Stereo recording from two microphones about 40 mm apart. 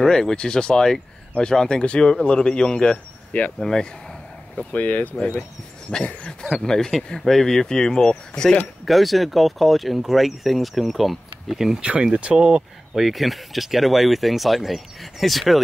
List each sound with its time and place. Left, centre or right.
0.0 s speech: centre
4.6 s speech: left
5.9 s speech: left
6.5 s speech: centre
8.8 s speech: centre
12.0 s speech: right
12.4 s speech: centre